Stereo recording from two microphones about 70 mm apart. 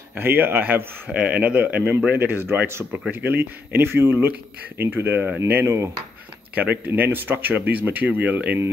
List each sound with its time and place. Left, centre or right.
0.1 s a man's voice: right
6.5 s a man's voice: right